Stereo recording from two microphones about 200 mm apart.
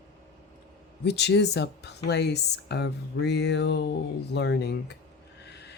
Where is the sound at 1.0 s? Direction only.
60° left (ahead or behind).